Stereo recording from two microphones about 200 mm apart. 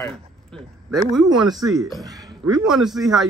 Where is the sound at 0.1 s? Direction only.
Centre (ahead or behind).